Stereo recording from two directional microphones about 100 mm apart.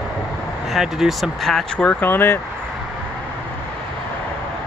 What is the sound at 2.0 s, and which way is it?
Speech, 20° left (ahead or behind).